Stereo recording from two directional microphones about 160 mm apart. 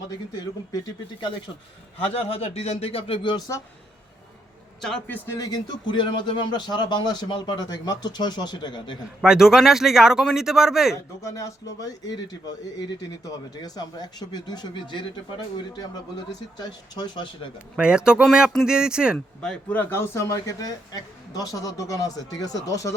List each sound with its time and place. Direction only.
2.0 s speech: 40° left (ahead or behind)
4.8 s a man's voice: 5° left (ahead or behind)
5.4 s speech: 25° left (ahead or behind)
9.2 s speech: 5° right (ahead or behind)
10.9 s speech: 20° left (ahead or behind)
16.6 s speech: 25° left (ahead or behind)
17.7 s speech: 5° right (ahead or behind)
19.4 s speech: 5° left (ahead or behind)